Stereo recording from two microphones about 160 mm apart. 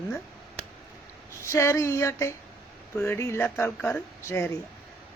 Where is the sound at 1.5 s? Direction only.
20° left (ahead or behind).